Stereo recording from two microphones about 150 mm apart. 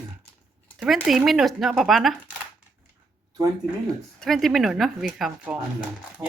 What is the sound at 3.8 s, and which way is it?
Speech, 5° left (ahead or behind).